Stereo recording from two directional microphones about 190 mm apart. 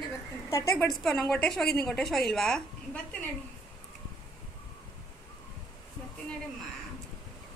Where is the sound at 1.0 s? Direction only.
5° left (ahead or behind).